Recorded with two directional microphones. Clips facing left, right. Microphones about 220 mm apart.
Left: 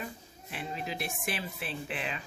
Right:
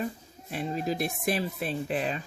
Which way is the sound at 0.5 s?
40° right (ahead or behind).